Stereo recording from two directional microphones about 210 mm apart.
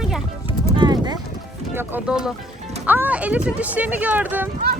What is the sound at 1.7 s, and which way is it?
Speech, 5° right (ahead or behind).